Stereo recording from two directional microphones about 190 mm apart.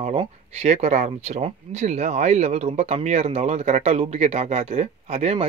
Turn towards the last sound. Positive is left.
turn(degrees=-35)  # may be behind; listen again after turning